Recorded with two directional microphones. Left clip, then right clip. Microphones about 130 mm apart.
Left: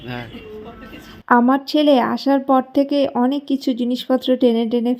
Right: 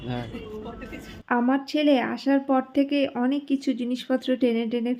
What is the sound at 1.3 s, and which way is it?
Speech, 50° left (ahead or behind).